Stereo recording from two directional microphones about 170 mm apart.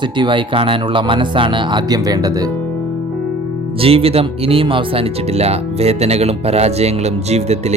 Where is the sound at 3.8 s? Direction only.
35° right (ahead or behind).